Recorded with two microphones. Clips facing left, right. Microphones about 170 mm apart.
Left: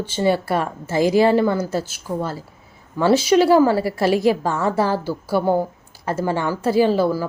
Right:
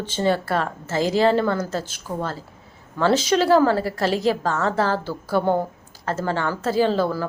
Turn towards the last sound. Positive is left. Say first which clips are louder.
# left 3 dB
turn(degrees=10)  # may be behind; listen again after turning